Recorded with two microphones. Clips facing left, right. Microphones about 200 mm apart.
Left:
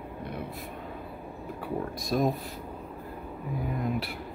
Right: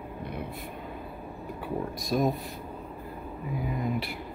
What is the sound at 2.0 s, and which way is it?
Speech, centre (ahead or behind).